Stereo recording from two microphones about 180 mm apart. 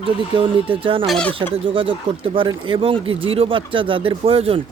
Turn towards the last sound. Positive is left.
turn(degrees=-30)  # may be behind; listen again after turning